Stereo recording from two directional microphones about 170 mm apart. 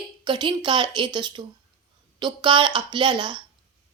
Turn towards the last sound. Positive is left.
turn(degrees=-30)  # may be behind; listen again after turning